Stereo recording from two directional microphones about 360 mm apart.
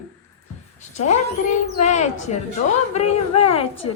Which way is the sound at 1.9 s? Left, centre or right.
Centre.